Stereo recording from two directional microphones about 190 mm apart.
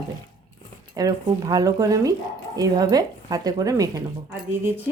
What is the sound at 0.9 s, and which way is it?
Speech, 20° right (ahead or behind).